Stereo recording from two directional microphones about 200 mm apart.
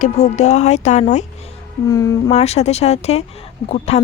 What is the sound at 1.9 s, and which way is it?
Speech, 15° left (ahead or behind).